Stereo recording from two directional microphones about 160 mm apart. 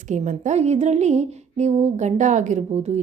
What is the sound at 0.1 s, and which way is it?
A woman's voice, 50° right (ahead or behind).